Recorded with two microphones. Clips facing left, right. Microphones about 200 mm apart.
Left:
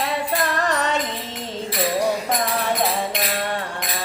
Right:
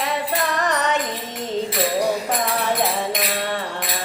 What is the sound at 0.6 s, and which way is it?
Music, 20° right (ahead or behind).